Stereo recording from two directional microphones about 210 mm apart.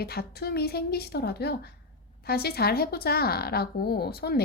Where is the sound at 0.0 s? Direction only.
50° left (ahead or behind).